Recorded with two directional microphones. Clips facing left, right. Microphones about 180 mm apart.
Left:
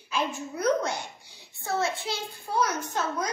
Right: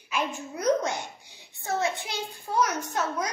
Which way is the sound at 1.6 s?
20° right (ahead or behind).